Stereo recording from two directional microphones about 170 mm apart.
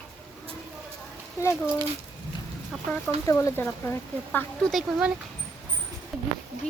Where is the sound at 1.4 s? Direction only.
15° left (ahead or behind).